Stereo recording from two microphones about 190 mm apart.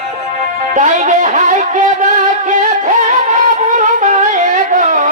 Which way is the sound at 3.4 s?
40° right (ahead or behind).